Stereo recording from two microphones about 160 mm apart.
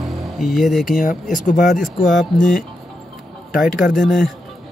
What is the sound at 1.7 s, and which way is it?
Speech, centre (ahead or behind).